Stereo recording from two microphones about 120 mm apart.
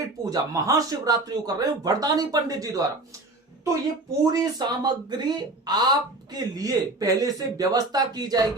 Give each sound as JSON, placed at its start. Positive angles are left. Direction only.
{"t": 0.3, "sound": "speech", "side_deg": -30}
{"t": 4.3, "sound": "speech", "side_deg": -35}